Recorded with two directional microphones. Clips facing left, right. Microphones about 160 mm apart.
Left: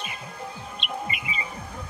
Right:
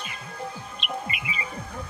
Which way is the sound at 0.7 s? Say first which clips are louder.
Left 1 dB; centre (ahead or behind).